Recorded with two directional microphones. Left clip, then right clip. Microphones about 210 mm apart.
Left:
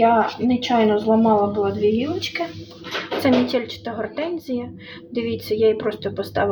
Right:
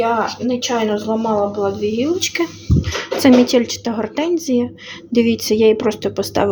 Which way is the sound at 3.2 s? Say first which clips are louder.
Right 7 dB; 35° right (ahead or behind).